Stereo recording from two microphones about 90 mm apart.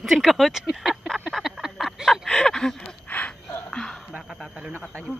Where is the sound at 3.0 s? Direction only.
15° left (ahead or behind).